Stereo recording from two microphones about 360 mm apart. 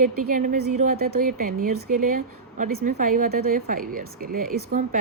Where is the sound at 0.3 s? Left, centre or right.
Right.